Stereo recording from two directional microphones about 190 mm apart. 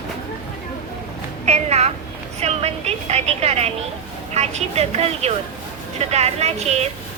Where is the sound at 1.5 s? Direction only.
35° right (ahead or behind).